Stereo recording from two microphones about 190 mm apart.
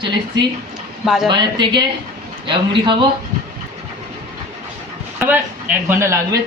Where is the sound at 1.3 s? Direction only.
25° right (ahead or behind).